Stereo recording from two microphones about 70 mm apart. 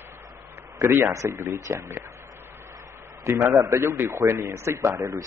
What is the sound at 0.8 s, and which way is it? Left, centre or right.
A man's voice, right.